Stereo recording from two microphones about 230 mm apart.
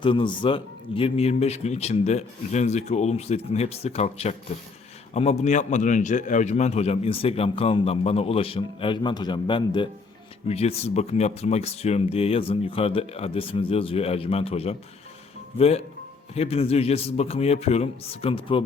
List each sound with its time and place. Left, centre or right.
0.0 s a man's voice: left